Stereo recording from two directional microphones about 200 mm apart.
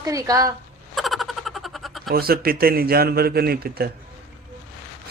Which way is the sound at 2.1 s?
50° right (ahead or behind).